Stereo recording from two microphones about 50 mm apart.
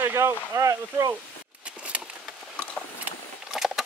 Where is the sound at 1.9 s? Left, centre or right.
Right.